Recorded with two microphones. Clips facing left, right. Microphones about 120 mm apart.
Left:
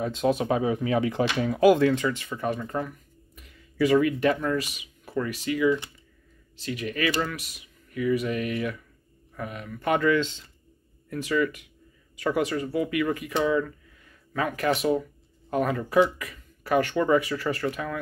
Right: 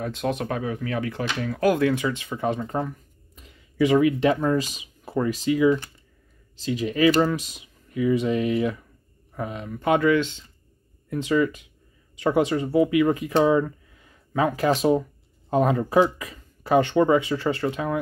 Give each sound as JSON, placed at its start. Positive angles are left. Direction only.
{"t": 0.0, "sound": "speech", "side_deg": 0}
{"t": 0.5, "sound": "speech", "side_deg": 20}
{"t": 1.7, "sound": "speech", "side_deg": 0}
{"t": 3.3, "sound": "a sound", "side_deg": -25}
{"t": 4.2, "sound": "speech", "side_deg": -20}